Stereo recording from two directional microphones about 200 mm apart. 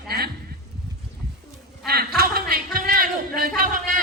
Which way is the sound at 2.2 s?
50° right (ahead or behind).